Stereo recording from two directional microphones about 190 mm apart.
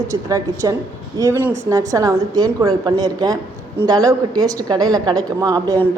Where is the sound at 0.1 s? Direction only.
15° right (ahead or behind).